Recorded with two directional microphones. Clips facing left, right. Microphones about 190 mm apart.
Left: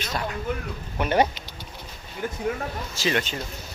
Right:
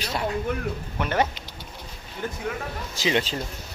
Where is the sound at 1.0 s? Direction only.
15° left (ahead or behind).